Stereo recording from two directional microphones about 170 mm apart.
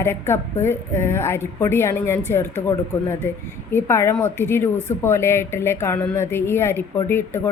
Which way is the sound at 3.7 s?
15° left (ahead or behind).